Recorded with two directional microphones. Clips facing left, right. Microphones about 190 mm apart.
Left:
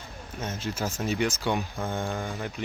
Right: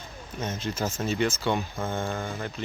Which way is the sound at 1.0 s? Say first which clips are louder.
Even; 15° left (ahead or behind).